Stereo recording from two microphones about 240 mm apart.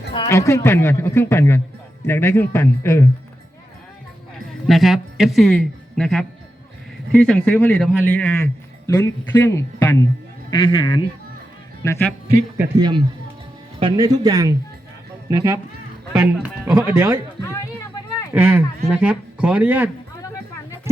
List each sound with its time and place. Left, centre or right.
0.1 s a man's voice: centre
4.6 s a man's voice: centre
12.5 s speech: centre
17.5 s a sound: centre
18.3 s a man's voice: centre